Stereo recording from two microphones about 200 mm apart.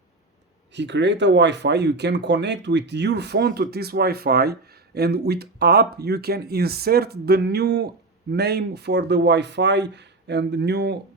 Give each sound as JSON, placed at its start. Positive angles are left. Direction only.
{"t": 0.7, "sound": "speech", "side_deg": -60}